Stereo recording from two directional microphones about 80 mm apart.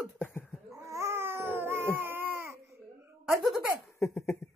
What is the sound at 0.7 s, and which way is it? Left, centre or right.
Cat, right.